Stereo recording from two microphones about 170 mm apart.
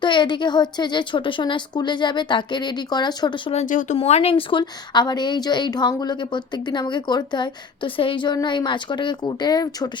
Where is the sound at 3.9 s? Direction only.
35° left (ahead or behind).